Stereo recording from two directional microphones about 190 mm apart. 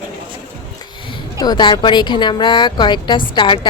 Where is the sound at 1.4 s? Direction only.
25° left (ahead or behind).